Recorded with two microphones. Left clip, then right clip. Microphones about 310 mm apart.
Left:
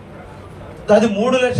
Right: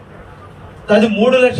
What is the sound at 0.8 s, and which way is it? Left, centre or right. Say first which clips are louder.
Speech: right 2 dB; left.